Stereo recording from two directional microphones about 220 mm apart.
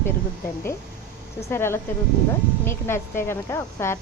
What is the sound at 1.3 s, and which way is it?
Speech, 10° left (ahead or behind).